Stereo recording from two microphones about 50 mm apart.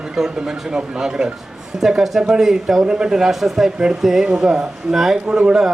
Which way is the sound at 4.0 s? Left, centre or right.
Centre.